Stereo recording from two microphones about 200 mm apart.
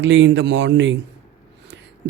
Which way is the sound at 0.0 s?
65° right (ahead or behind).